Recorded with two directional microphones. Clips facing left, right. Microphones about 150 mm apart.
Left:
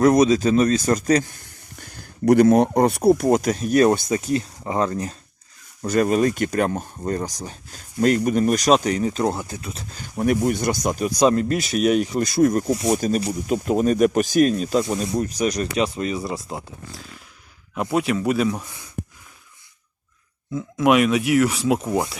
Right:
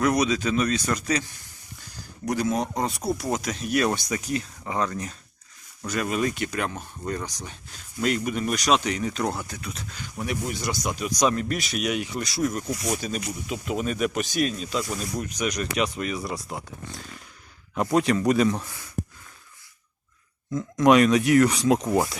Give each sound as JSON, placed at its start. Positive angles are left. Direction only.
{"t": 0.0, "sound": "speech", "side_deg": 40}
{"t": 1.8, "sound": "speech", "side_deg": 55}
{"t": 12.5, "sound": "speech", "side_deg": 35}
{"t": 14.8, "sound": "speech", "side_deg": 30}
{"t": 16.9, "sound": "a sound", "side_deg": 0}
{"t": 17.7, "sound": "speech", "side_deg": 5}
{"t": 18.6, "sound": "speech", "side_deg": 20}
{"t": 20.5, "sound": "speech", "side_deg": 5}